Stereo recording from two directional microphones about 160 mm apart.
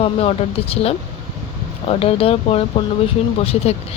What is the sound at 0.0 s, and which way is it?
Speech, 40° left (ahead or behind).